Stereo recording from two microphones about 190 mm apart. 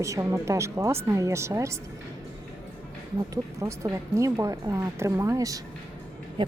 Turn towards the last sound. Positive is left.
turn(degrees=-25)  # may be behind; listen again after turning